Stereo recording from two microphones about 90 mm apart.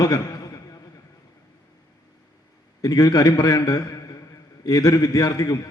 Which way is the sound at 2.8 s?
40° left (ahead or behind).